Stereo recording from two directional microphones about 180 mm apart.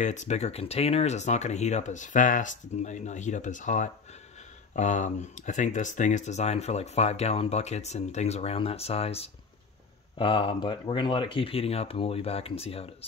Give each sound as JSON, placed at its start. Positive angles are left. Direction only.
{"t": 0.0, "sound": "speech", "side_deg": 40}